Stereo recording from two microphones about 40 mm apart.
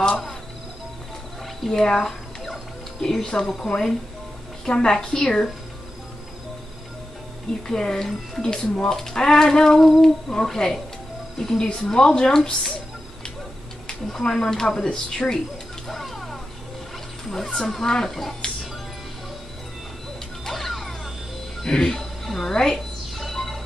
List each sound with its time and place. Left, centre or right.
1.8 s music: centre
3.4 s a woman's voice: centre
4.6 s a woman's voice: left
7.6 s speech: centre
14.0 s speech: centre
15.9 s a sound: centre
17.3 s speech: centre
18.4 s music: left
20.4 s music: centre